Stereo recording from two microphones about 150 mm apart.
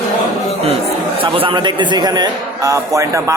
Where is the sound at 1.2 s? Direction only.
35° right (ahead or behind).